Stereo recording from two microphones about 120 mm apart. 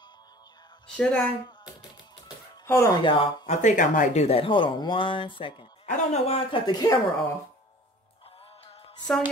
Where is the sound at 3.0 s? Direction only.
45° left (ahead or behind).